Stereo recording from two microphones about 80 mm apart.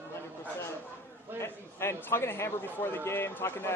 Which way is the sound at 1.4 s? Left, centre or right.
Left.